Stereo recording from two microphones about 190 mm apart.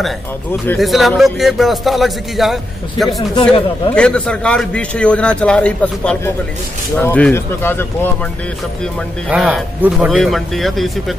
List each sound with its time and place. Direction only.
0.0 s speech: 10° left (ahead or behind)
0.7 s speech: centre (ahead or behind)
3.3 s speech: 25° left (ahead or behind)
3.9 s speech: 5° left (ahead or behind)
9.3 s speech: 10° right (ahead or behind)